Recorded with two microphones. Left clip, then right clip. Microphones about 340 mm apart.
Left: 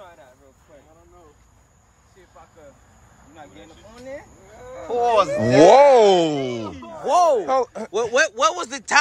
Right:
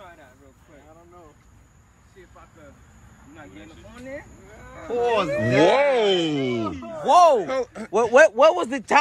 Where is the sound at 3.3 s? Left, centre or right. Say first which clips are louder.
Left 1 dB; left; by 6.6 s centre.